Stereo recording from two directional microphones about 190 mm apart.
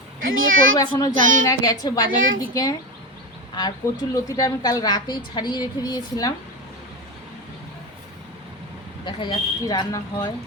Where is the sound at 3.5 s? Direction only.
20° left (ahead or behind).